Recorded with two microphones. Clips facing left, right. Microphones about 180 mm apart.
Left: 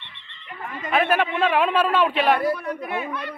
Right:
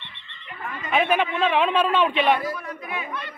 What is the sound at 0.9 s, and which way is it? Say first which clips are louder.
A man's voice: left 1 dB; 5° left (ahead or behind).